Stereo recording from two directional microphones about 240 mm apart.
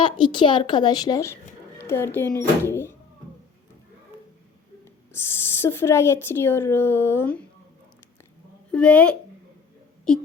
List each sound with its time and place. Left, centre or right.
0.0 s speech: centre
5.1 s speech: centre
8.7 s a woman's voice: centre